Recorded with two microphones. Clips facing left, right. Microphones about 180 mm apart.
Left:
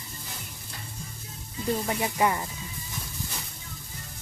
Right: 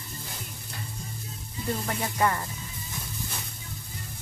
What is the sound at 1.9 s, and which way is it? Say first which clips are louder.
Speech: even; 15° left (ahead or behind).